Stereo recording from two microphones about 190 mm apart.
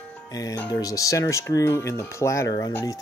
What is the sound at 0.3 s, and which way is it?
Speech, 20° left (ahead or behind).